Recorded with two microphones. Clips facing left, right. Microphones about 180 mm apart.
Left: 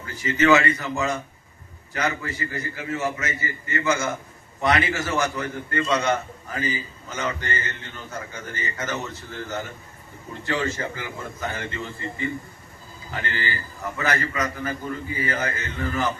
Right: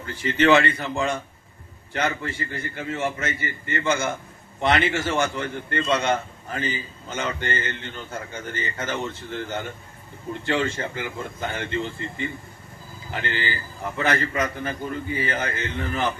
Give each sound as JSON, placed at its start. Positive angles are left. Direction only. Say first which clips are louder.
{"t": 0.0, "sound": "a man's voice", "louder": "right 1 dB", "side_deg": -30}
{"t": 13.1, "sound": "a man's voice", "louder": "right 1 dB", "side_deg": -30}